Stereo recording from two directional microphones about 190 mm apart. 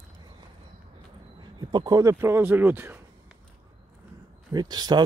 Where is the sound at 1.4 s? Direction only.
20° right (ahead or behind).